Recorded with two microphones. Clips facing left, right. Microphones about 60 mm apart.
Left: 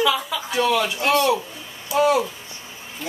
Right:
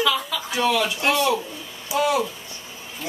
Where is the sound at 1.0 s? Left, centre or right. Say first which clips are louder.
Left 4 dB; centre.